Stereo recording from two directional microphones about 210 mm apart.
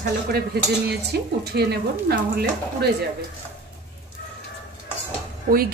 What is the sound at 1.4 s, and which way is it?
Speech, 50° right (ahead or behind).